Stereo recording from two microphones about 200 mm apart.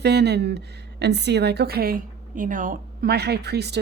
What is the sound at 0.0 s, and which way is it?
A woman's voice, 55° right (ahead or behind).